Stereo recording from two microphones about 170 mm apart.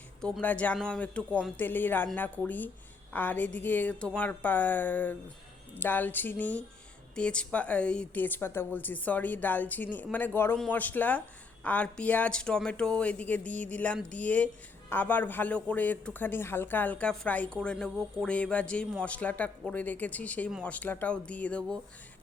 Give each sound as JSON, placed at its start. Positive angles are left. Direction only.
{"t": 0.2, "sound": "speech", "side_deg": 5}